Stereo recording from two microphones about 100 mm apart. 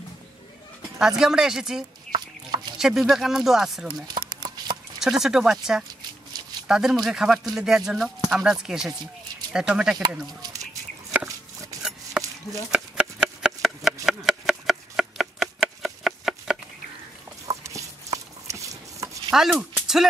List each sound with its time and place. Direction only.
0.9 s speech: 5° right (ahead or behind)
2.1 s stir: 45° right (ahead or behind)
2.8 s speech: 5° right (ahead or behind)
4.1 s chopping: 50° right (ahead or behind)
5.0 s speech: 5° right (ahead or behind)
10.4 s a sound: 35° right (ahead or behind)
12.2 s a sound: 10° right (ahead or behind)
17.5 s a sound: 35° right (ahead or behind)
19.3 s speech: 5° right (ahead or behind)